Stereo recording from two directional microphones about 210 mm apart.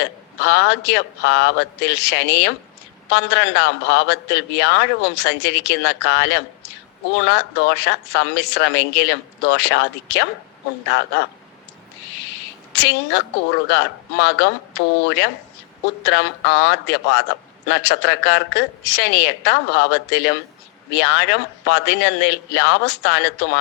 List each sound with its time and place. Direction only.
0.0 s a man's voice: 55° left (ahead or behind)
12.7 s a man's voice: 55° left (ahead or behind)